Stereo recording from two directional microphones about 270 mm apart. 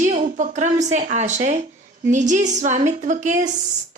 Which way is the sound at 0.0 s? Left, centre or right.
Right.